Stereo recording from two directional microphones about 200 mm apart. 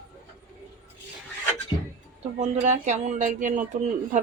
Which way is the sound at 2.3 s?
35° right (ahead or behind).